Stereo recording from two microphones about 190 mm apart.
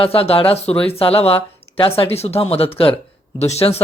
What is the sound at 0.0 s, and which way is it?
A man's voice, 30° left (ahead or behind).